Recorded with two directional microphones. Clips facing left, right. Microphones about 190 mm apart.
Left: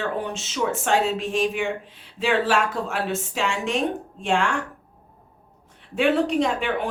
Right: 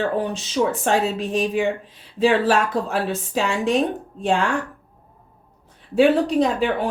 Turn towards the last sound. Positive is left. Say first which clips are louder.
# right 4 dB
turn(degrees=-35)  # may be behind; listen again after turning